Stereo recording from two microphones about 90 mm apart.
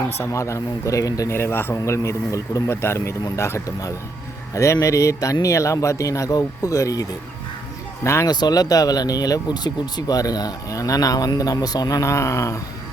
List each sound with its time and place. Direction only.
0.2 s speech: 30° left (ahead or behind)
1.3 s speech: 25° left (ahead or behind)
1.7 s speech: 35° left (ahead or behind)
8.3 s speech: 50° left (ahead or behind)